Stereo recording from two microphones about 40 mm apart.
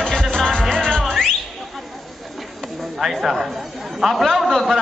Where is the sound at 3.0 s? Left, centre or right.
Centre.